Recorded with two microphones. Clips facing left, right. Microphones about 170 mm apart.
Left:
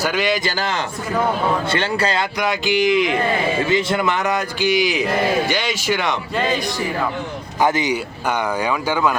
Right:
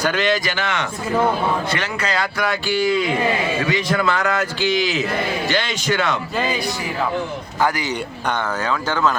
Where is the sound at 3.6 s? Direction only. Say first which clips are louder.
Left 2 dB; 25° left (ahead or behind).